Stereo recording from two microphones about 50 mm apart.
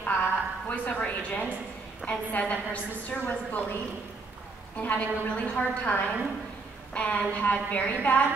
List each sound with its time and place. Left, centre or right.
0.0 s a woman's voice: left
4.7 s a woman's voice: left